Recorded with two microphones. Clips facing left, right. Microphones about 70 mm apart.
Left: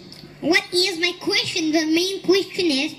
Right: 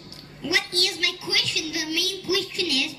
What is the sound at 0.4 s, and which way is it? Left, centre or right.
A woman's voice, left.